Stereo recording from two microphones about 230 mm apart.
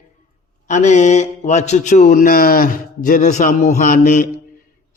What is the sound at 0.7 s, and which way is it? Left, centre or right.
A man's voice, left.